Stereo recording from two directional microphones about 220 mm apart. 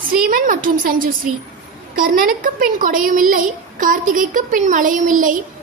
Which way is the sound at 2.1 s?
40° right (ahead or behind).